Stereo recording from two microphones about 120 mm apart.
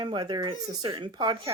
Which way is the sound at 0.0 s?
35° right (ahead or behind).